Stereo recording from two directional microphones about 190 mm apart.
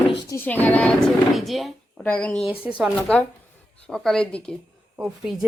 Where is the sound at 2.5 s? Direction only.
5° right (ahead or behind).